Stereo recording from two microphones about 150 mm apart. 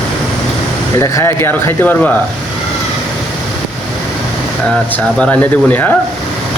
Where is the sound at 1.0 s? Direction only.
20° left (ahead or behind).